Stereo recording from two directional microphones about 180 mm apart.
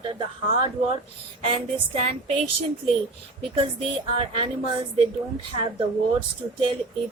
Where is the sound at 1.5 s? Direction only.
30° right (ahead or behind).